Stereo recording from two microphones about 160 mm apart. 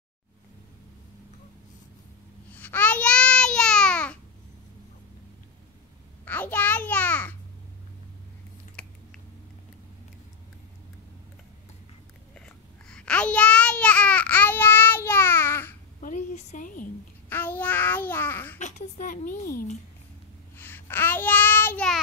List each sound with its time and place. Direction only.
2.5 s babbling: 10° left (ahead or behind)
6.2 s babbling: 10° left (ahead or behind)
8.8 s a sound: 10° left (ahead or behind)
12.4 s babbling: 5° left (ahead or behind)
16.0 s a sound: 55° left (ahead or behind)
17.3 s child singing: 10° left (ahead or behind)
18.6 s a woman's voice: 55° left (ahead or behind)
20.5 s child singing: 15° left (ahead or behind)